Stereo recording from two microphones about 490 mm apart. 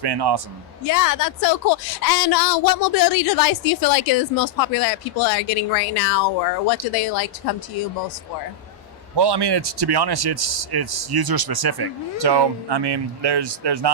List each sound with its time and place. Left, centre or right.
0.0 s speech: right
0.9 s a woman's voice: left
9.1 s speech: right